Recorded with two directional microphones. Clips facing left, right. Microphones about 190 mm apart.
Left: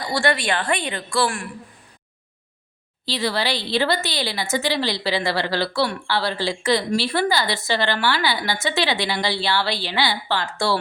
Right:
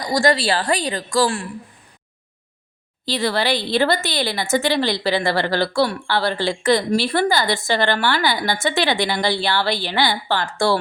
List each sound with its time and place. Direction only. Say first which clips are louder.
0.0 s a woman's voice: right 4 dB; 40° right (ahead or behind)
3.1 s a woman's voice: right 3 dB; 50° right (ahead or behind)